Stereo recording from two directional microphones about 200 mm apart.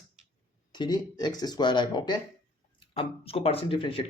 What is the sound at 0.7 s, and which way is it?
Speech, 20° left (ahead or behind).